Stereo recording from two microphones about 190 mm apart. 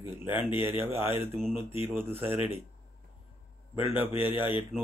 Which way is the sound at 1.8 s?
10° right (ahead or behind).